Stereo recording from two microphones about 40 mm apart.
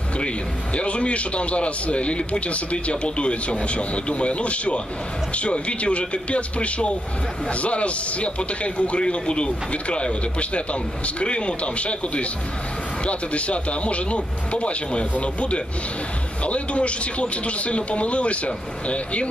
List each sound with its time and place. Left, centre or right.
0.7 s speech: left